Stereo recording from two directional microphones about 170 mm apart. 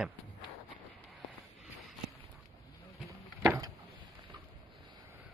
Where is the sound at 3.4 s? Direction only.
20° right (ahead or behind).